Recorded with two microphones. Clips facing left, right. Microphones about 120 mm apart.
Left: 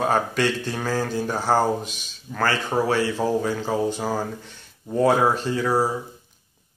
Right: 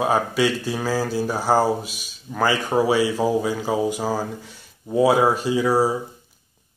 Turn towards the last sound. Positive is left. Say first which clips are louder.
# right 3 dB
turn(degrees=-10)  # may be behind; listen again after turning